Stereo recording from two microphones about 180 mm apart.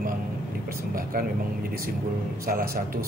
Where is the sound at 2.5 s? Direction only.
50° right (ahead or behind).